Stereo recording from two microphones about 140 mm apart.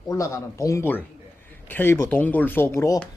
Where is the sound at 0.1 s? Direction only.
20° left (ahead or behind).